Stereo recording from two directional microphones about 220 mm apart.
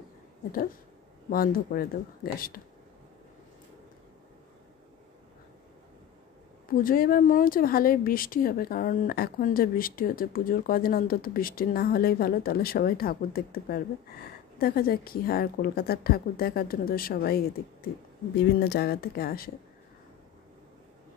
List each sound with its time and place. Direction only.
1.3 s speech: 40° left (ahead or behind)
6.8 s speech: 40° left (ahead or behind)